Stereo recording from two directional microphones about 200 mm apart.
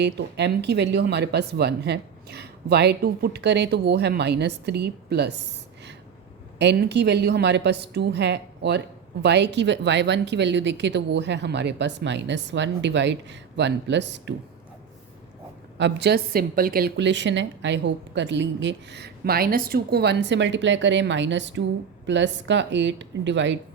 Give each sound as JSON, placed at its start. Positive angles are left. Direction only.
{"t": 0.0, "sound": "a woman's voice", "side_deg": -60}
{"t": 6.6, "sound": "a woman's voice", "side_deg": -60}
{"t": 15.8, "sound": "a woman's voice", "side_deg": -55}